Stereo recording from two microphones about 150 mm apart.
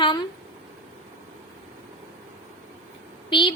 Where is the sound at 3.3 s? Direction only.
35° left (ahead or behind).